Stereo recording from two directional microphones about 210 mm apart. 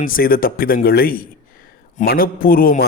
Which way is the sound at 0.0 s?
45° left (ahead or behind).